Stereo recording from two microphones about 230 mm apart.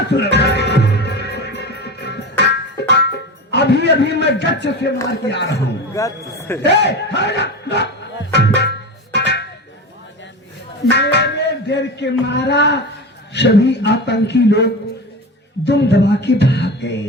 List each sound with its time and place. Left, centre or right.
0.1 s music: left
3.5 s a man's voice: left
5.5 s a man's voice: centre
6.7 s a man's voice: left
8.3 s music: left
10.9 s music: left
13.3 s a man's voice: left
15.6 s music: left